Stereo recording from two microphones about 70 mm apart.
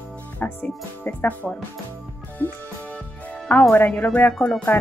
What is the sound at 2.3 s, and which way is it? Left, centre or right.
Music, left.